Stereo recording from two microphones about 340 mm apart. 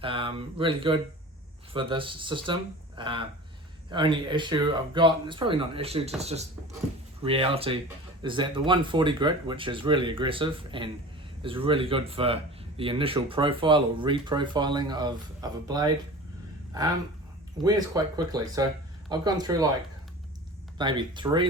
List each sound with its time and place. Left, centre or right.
0.0 s speech: centre
17.6 s speech: centre
20.7 s speech: centre